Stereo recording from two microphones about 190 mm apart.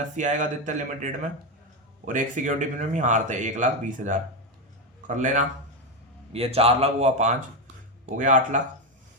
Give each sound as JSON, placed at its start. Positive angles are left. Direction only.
{"t": 0.2, "sound": "speech", "side_deg": -40}